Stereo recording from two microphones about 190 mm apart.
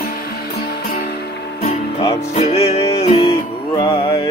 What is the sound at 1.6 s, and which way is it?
Music, 35° left (ahead or behind).